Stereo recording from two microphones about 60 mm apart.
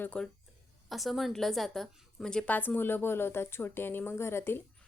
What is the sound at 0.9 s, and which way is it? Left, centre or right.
A woman's voice, centre.